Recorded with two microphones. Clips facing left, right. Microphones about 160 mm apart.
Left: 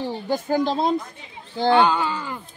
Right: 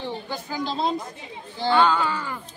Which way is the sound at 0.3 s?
50° left (ahead or behind).